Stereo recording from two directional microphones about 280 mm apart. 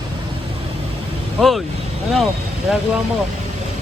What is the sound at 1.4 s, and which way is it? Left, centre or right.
Speech, centre.